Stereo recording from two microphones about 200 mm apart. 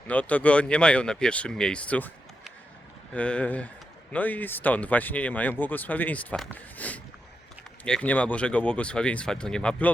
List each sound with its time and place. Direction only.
0.1 s speech: 5° left (ahead or behind)